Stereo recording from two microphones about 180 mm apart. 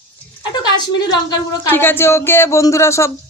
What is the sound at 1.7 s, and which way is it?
Speech, 10° left (ahead or behind).